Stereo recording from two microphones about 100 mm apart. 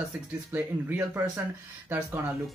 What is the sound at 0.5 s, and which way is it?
Speech, 20° right (ahead or behind).